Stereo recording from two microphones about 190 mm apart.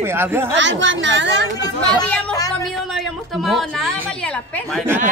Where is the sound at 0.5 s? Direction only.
75° right (ahead or behind).